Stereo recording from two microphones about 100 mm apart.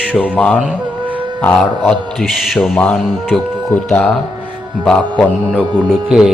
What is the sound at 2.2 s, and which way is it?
Speech, centre (ahead or behind).